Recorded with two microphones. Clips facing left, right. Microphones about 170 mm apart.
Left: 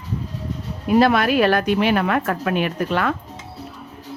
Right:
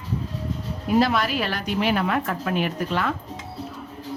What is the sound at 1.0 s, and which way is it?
A woman's voice, 60° left (ahead or behind).